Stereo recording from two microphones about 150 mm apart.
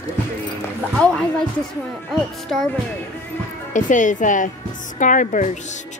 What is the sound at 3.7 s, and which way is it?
A woman's voice, 60° left (ahead or behind).